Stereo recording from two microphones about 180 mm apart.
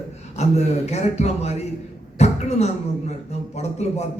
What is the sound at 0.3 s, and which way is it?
A man's voice, 40° left (ahead or behind).